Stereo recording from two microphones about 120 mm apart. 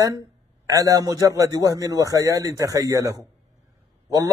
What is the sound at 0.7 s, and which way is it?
A man's voice, 30° right (ahead or behind).